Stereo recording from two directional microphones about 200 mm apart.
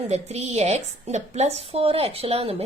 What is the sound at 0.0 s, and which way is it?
A woman's voice, 35° right (ahead or behind).